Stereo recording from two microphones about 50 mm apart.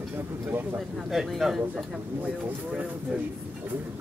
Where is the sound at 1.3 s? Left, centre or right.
Centre.